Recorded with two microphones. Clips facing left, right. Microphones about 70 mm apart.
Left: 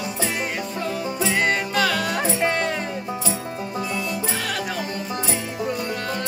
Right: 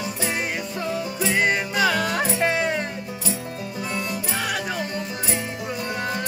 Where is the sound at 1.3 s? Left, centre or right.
Centre.